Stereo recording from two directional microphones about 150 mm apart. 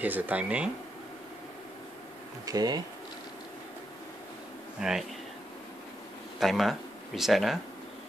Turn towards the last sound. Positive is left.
turn(degrees=0)  # may be behind; listen again after turning